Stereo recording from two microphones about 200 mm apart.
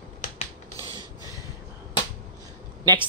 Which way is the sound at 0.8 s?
25° right (ahead or behind).